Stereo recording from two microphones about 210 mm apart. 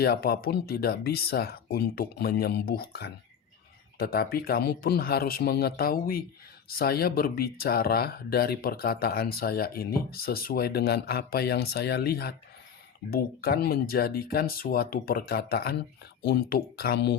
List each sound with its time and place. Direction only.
0.0 s speech: 45° left (ahead or behind)